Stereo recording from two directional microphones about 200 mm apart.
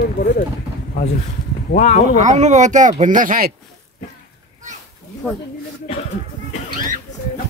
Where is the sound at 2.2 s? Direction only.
35° right (ahead or behind).